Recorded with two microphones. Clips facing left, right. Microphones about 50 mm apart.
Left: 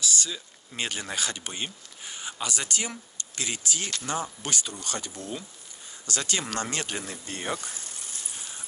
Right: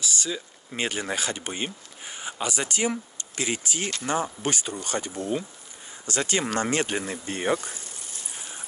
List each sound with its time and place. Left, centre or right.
0.0 s speech: right